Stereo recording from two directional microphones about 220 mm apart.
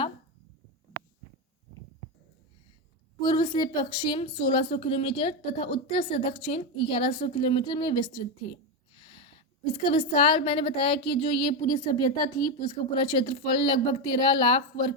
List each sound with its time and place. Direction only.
3.2 s a woman's voice: 20° left (ahead or behind)
9.0 s a sound: 25° left (ahead or behind)
9.7 s a woman's voice: 25° left (ahead or behind)